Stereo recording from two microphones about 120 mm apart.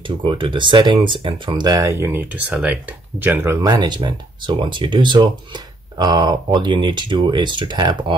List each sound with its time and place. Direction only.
0.2 s speech: 45° right (ahead or behind)
1.8 s speech: 20° right (ahead or behind)
3.6 s speech: 35° right (ahead or behind)